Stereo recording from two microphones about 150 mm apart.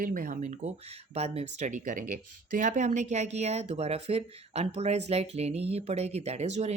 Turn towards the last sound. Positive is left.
turn(degrees=-45)  # may be behind; listen again after turning